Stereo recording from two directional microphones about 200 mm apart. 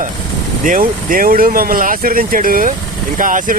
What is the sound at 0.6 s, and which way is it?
Speech, 40° right (ahead or behind).